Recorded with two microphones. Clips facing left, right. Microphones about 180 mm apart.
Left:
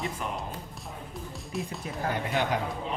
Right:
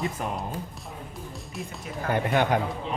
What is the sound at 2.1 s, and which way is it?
Speech, 55° right (ahead or behind).